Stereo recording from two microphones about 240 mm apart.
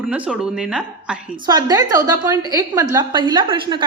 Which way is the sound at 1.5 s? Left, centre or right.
Centre.